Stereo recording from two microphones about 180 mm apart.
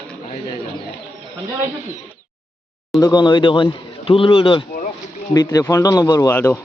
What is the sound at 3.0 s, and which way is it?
A man's voice, 25° left (ahead or behind).